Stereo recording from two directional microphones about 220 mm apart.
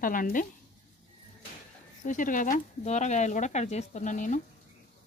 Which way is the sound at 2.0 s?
35° left (ahead or behind).